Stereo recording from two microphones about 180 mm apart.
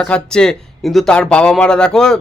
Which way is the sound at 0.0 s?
5° left (ahead or behind).